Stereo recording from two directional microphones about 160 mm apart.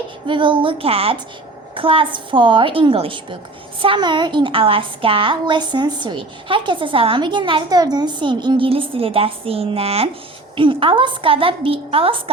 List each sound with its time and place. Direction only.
0.3 s a woman's voice: 30° right (ahead or behind)